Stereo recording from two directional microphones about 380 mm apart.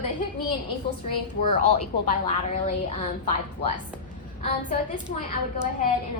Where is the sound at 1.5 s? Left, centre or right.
Centre.